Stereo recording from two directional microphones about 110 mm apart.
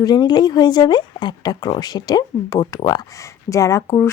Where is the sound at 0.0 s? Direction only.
40° left (ahead or behind).